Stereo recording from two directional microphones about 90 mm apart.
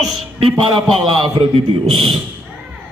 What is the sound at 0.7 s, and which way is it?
Speech, 65° right (ahead or behind).